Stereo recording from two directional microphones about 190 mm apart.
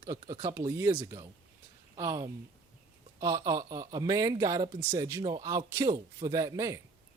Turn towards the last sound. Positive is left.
turn(degrees=-20)  # may be behind; listen again after turning